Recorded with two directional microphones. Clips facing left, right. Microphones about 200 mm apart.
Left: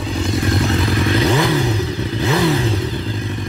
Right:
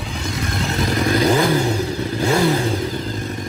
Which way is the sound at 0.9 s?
45° right (ahead or behind).